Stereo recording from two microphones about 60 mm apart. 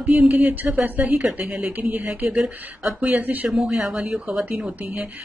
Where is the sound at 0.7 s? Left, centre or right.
Right.